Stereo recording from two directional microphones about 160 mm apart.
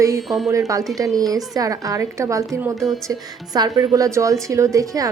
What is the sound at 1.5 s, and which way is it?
A woman's voice, 20° right (ahead or behind).